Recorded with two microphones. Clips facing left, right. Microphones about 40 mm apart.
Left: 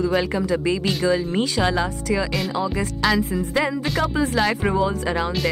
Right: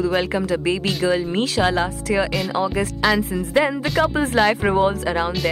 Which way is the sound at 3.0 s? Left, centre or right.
Centre.